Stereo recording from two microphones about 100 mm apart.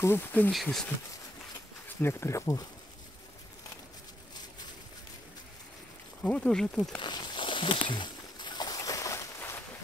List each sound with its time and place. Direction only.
0.0 s speech: 20° left (ahead or behind)
0.5 s speech: centre (ahead or behind)
2.0 s speech: 25° left (ahead or behind)
6.2 s speech: 10° left (ahead or behind)
7.0 s a sound: 50° left (ahead or behind); by 9.2 s 35° left (ahead or behind)